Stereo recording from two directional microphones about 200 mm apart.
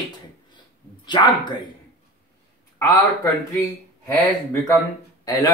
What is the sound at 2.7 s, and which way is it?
Speech, 10° left (ahead or behind).